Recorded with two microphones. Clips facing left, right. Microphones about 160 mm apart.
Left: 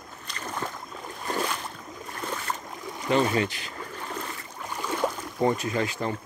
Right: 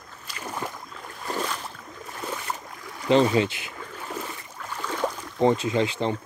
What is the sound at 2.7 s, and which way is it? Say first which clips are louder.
Boat: left 3 dB; 20° left (ahead or behind).